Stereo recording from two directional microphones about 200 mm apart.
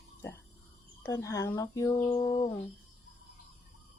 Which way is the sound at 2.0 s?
25° left (ahead or behind).